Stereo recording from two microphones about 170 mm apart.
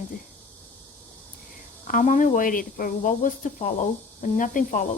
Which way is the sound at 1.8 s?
50° left (ahead or behind).